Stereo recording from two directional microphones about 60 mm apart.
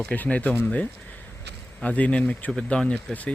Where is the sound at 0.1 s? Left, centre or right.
Left.